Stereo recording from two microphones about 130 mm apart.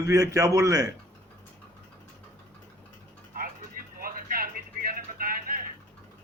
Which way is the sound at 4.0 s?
90° right.